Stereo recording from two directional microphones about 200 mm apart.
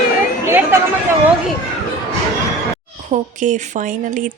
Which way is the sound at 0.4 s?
15° right (ahead or behind).